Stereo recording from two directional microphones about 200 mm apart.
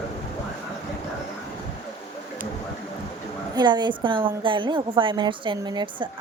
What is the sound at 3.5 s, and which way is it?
A woman's voice, 20° right (ahead or behind).